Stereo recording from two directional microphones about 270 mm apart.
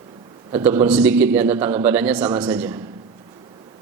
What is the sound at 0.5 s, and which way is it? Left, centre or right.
A man's voice, centre.